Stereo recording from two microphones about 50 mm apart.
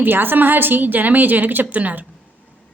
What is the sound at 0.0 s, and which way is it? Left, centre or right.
A woman's voice, right.